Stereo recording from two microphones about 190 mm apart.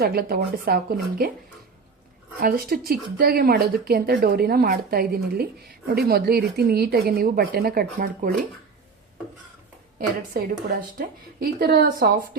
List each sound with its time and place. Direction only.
0.0 s a woman's voice: 55° right (ahead or behind)
2.4 s speech: 50° right (ahead or behind)
10.3 s a woman's voice: 55° right (ahead or behind)